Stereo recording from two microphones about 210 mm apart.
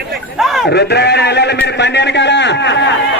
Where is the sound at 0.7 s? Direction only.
55° left (ahead or behind).